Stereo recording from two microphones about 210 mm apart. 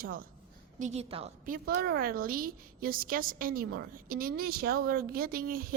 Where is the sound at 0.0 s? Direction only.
45° right (ahead or behind).